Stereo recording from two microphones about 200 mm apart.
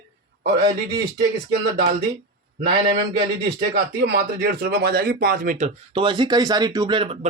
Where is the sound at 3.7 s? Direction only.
50° right (ahead or behind).